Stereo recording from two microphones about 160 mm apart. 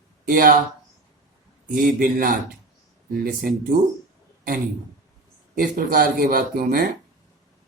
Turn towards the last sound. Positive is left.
turn(degrees=-65)  # may be behind; listen again after turning